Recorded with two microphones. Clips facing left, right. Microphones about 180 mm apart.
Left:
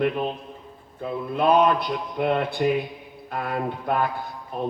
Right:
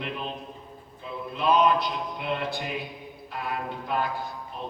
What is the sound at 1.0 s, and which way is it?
Speech, 50° left (ahead or behind).